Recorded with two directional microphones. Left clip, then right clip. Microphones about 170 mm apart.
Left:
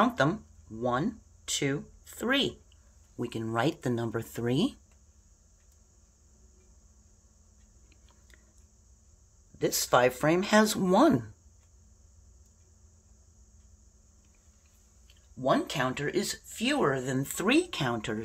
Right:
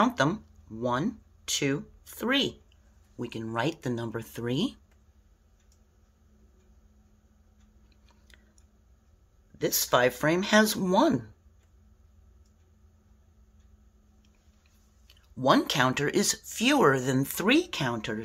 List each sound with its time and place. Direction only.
0.0 s speech: centre (ahead or behind)
3.2 s speech: 10° left (ahead or behind)
9.6 s speech: 5° left (ahead or behind)
15.3 s speech: 35° right (ahead or behind); by 18.2 s centre (ahead or behind)